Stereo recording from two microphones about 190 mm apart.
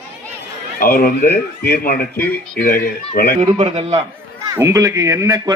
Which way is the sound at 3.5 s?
30° right (ahead or behind).